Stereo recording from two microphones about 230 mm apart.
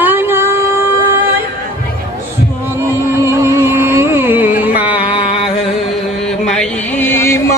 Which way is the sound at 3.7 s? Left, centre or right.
Centre.